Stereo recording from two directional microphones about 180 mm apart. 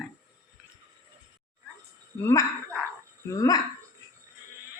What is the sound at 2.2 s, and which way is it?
Speech, 20° left (ahead or behind).